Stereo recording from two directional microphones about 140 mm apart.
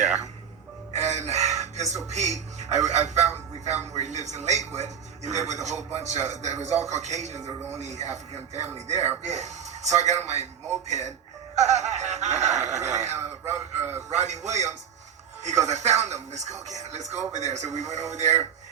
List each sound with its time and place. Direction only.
0.9 s crowing: 55° right (ahead or behind)
2.0 s speech: 55° right (ahead or behind)
7.4 s speech: 20° right (ahead or behind)
7.8 s speech: 55° right (ahead or behind)
13.1 s speech: 15° right (ahead or behind)
14.1 s speech: 55° right (ahead or behind)